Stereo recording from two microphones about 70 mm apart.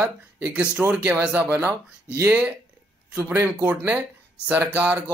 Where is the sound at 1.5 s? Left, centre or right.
Right.